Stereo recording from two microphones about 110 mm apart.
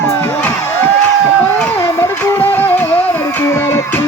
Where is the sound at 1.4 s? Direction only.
20° left (ahead or behind).